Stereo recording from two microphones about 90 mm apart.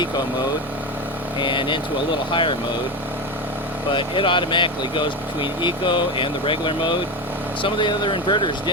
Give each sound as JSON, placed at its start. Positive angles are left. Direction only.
{"t": 1.4, "sound": "speech", "side_deg": 60}
{"t": 3.9, "sound": "speech", "side_deg": 65}